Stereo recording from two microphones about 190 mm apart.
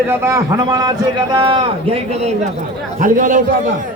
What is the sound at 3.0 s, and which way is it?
Speech, 45° right (ahead or behind).